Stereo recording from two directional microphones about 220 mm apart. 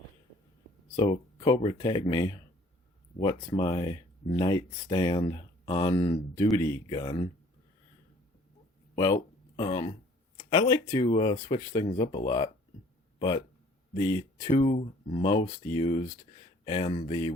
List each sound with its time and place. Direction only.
1.4 s speech: 20° left (ahead or behind)
9.0 s speech: 15° left (ahead or behind)